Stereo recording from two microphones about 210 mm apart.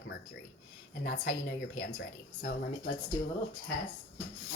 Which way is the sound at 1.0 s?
55° left (ahead or behind).